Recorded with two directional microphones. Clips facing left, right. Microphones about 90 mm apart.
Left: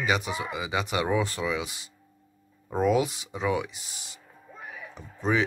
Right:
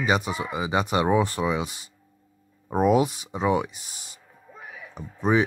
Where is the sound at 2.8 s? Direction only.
30° right (ahead or behind).